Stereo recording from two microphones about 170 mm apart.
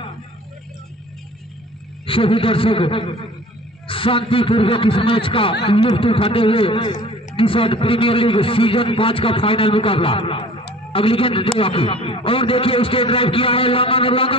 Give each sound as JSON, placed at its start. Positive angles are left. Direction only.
{"t": 2.0, "sound": "a man's voice", "side_deg": 30}